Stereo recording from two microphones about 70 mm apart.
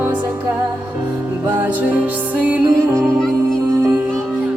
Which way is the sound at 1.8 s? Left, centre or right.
Centre.